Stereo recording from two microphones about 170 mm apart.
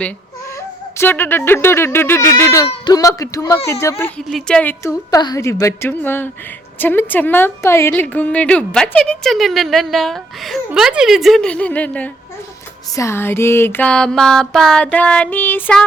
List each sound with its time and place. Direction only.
0.9 s a woman's voice: 10° left (ahead or behind)
4.3 s a woman's voice: 5° left (ahead or behind)